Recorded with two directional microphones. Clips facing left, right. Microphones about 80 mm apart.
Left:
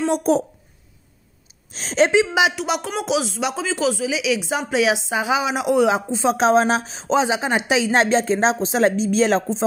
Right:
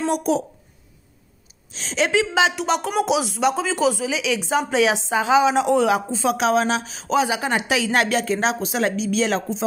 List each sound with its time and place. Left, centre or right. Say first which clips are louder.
0.1 s speech: left 3 dB; left
1.7 s a woman's voice: left 5 dB; left
2.0 s a woman's voice: even; centre
2.5 s speech: right 3 dB; centre
5.9 s speech: left 1 dB; left